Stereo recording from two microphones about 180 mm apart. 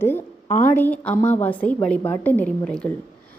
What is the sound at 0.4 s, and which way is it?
Speech, 45° left (ahead or behind).